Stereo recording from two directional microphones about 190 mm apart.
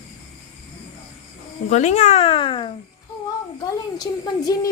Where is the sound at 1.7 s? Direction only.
35° left (ahead or behind).